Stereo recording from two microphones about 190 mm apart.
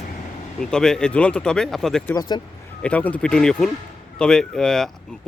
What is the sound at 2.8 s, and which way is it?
Speech, 5° left (ahead or behind).